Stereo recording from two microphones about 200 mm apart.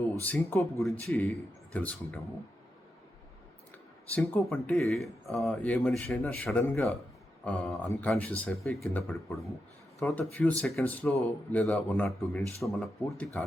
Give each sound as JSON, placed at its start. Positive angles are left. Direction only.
{"t": 0.2, "sound": "speech", "side_deg": 10}
{"t": 4.1, "sound": "speech", "side_deg": 0}